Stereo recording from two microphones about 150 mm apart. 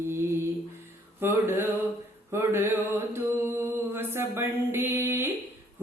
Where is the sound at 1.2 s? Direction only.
15° right (ahead or behind).